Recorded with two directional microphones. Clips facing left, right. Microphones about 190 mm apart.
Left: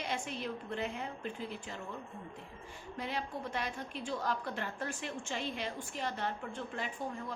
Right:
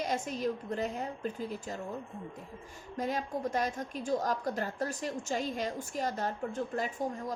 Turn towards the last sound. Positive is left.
turn(degrees=-40)  # may be behind; listen again after turning